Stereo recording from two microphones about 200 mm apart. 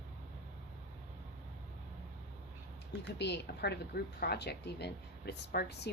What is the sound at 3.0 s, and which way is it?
Speech, 60° left (ahead or behind).